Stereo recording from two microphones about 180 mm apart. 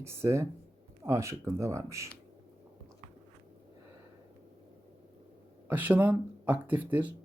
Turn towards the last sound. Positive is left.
turn(degrees=-10)  # may be behind; listen again after turning